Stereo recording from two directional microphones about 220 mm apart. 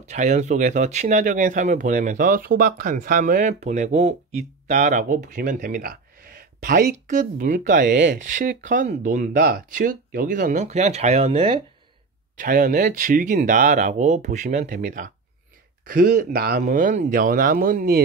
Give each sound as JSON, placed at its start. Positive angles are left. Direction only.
{"t": 0.0, "sound": "speech", "side_deg": -35}
{"t": 12.4, "sound": "speech", "side_deg": -35}
{"t": 16.3, "sound": "speech", "side_deg": -45}